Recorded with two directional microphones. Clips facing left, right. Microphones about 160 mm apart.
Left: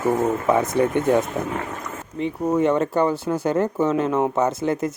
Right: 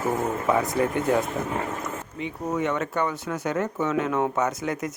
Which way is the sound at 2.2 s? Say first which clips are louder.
Left 7 dB; 35° left (ahead or behind).